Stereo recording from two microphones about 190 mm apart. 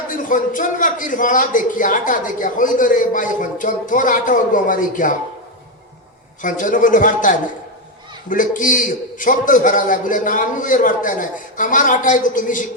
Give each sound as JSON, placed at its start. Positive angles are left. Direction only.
{"t": 0.1, "sound": "a man's voice", "side_deg": 45}
{"t": 6.4, "sound": "a man's voice", "side_deg": 45}